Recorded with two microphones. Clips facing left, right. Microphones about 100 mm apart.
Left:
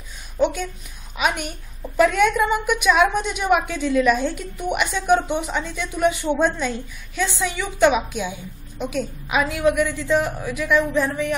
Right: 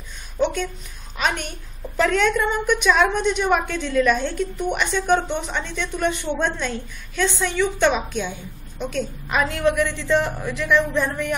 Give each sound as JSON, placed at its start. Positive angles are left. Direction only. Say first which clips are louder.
{"t": 0.4, "sound": "a woman's voice", "louder": "left 1 dB", "side_deg": 10}